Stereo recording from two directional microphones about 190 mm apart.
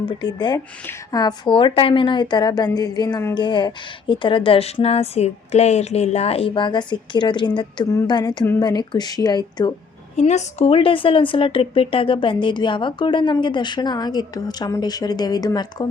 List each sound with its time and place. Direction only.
0.0 s a woman's voice: 25° left (ahead or behind)
10.2 s a woman's voice: 35° left (ahead or behind); by 15.9 s 20° left (ahead or behind)